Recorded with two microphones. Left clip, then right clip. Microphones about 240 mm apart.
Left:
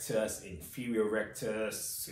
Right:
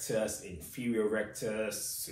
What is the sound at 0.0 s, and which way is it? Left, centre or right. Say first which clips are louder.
Speech: even; centre.